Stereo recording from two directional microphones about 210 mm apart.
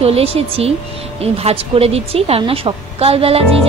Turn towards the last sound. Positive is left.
turn(degrees=-30)  # may be behind; listen again after turning